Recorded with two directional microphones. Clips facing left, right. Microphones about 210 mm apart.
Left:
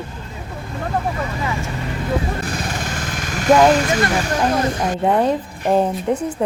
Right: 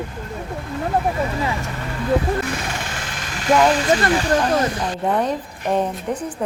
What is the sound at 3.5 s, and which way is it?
Speech, 45° left (ahead or behind).